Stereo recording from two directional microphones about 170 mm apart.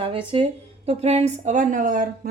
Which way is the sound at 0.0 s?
30° right (ahead or behind).